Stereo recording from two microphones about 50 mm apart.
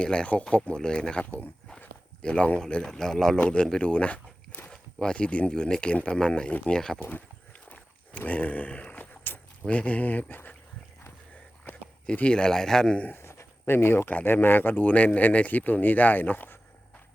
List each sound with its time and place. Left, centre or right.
0.0 s speech: centre
1.2 s speech: left
2.2 s speech: centre
4.7 s a sound: centre
5.5 s speech: centre
8.2 s a sound: left
9.6 s speech: left
12.1 s speech: left
13.2 s a sound: left
14.1 s speech: left